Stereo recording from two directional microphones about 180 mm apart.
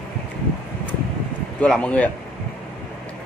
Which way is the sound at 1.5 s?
5° left (ahead or behind).